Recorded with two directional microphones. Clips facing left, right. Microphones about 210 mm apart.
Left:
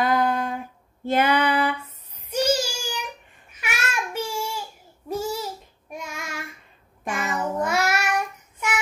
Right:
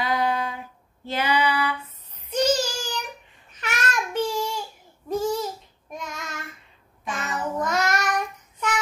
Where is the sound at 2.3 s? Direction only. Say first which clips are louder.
Right 1 dB; 10° left (ahead or behind).